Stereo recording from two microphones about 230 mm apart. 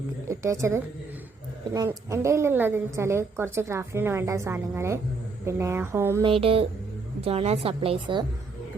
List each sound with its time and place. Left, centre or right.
0.3 s a woman's voice: centre
6.2 s a woman's voice: right